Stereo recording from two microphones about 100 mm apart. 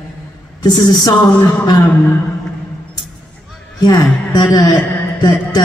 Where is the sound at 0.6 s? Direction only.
45° left (ahead or behind).